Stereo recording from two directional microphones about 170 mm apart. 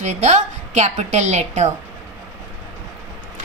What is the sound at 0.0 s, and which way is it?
A woman's voice, 45° right (ahead or behind).